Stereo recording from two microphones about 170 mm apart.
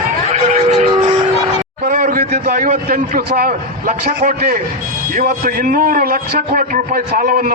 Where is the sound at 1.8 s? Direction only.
55° right (ahead or behind).